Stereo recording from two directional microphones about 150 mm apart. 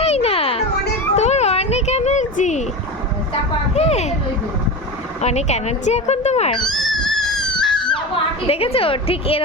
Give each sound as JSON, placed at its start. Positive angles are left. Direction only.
{"t": 0.0, "sound": "music", "side_deg": 45}
{"t": 1.1, "sound": "cat", "side_deg": 50}
{"t": 3.8, "sound": "speech", "side_deg": 50}
{"t": 5.2, "sound": "speech", "side_deg": 45}
{"t": 6.6, "sound": "screaming", "side_deg": 5}
{"t": 8.4, "sound": "a woman's voice", "side_deg": 40}